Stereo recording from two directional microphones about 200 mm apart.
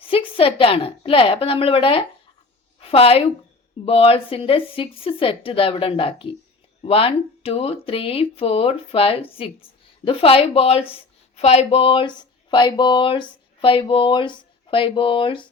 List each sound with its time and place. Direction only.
0.0 s a woman's voice: 25° left (ahead or behind)